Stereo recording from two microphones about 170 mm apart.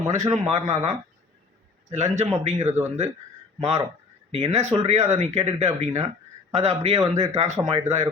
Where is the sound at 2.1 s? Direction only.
40° right (ahead or behind).